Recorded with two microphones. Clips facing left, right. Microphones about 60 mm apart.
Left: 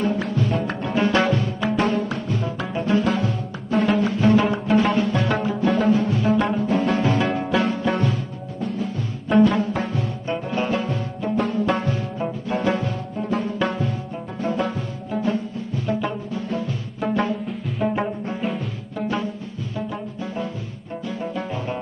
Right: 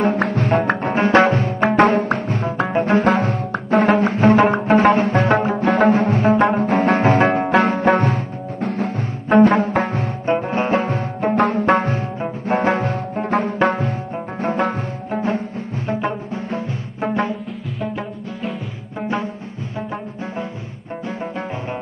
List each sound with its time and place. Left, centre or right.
0.0 s music: right
0.7 s music: right
5.7 s music: right
8.6 s music: right
9.3 s music: right
18.9 s music: right
21.2 s music: right